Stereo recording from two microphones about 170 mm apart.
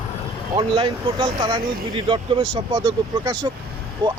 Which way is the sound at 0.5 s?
30° right (ahead or behind).